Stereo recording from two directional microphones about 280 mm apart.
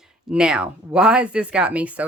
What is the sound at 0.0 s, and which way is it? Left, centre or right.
Speech, centre.